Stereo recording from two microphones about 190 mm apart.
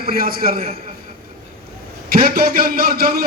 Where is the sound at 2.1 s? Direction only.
50° right (ahead or behind).